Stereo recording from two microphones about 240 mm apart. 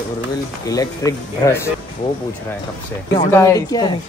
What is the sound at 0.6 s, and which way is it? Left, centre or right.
Speech, centre.